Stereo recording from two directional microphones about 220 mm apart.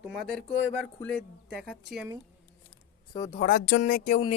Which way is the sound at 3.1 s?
20° left (ahead or behind).